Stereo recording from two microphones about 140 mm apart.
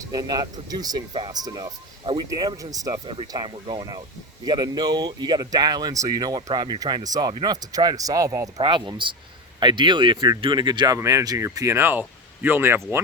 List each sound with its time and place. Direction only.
0.0 s speech: 30° right (ahead or behind)